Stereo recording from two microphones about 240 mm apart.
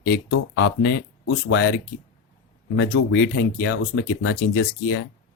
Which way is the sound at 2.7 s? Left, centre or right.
Left.